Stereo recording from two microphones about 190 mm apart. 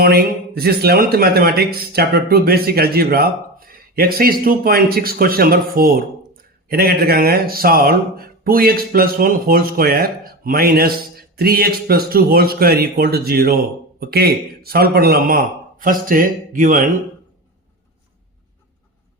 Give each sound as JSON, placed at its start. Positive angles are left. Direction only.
{"t": 0.0, "sound": "a man's voice", "side_deg": -55}